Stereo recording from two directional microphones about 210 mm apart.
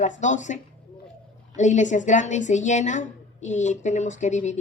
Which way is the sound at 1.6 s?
35° left (ahead or behind).